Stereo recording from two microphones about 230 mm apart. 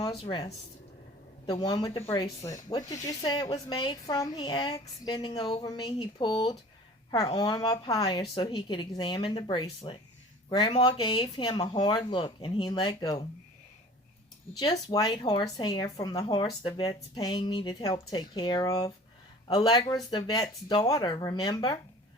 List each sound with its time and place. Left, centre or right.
0.0 s a woman's voice: left
14.6 s speech: centre